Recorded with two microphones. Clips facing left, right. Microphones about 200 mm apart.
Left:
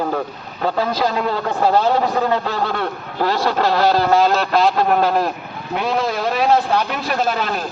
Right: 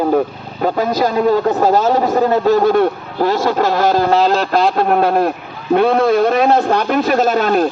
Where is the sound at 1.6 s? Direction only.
40° right (ahead or behind).